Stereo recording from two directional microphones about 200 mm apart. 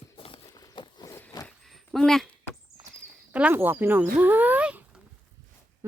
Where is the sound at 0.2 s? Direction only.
25° left (ahead or behind).